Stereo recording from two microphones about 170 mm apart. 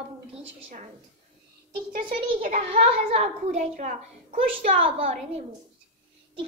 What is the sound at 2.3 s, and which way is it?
Speech, 50° right (ahead or behind).